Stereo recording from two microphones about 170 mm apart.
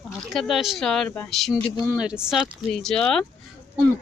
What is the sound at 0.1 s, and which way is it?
Speech, centre (ahead or behind).